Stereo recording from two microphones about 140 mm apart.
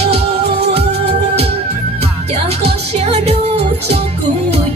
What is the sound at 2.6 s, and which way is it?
Music, 50° right (ahead or behind).